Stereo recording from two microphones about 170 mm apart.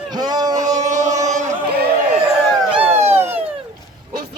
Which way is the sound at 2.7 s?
10° right (ahead or behind).